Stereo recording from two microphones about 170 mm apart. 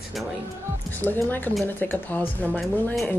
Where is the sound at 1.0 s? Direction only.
10° left (ahead or behind).